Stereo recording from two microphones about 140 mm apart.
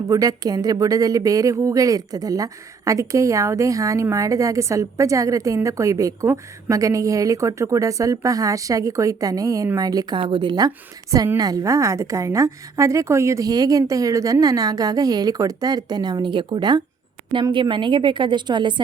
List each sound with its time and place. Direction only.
0.1 s a woman's voice: 25° right (ahead or behind)